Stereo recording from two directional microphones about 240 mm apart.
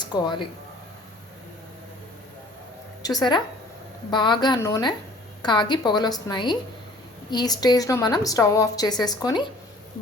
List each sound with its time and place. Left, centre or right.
0.0 s speech: centre
3.0 s a woman's voice: centre